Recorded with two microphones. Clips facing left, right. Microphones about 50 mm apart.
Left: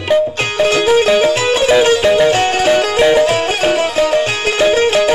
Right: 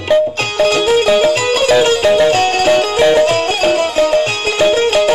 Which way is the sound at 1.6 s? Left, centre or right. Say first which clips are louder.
Even; centre.